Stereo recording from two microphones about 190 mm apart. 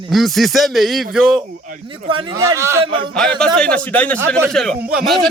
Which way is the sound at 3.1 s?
5° left (ahead or behind).